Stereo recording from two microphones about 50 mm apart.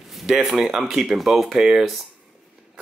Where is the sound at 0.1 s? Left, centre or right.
Centre.